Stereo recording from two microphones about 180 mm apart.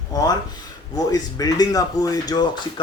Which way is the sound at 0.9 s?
20° left (ahead or behind).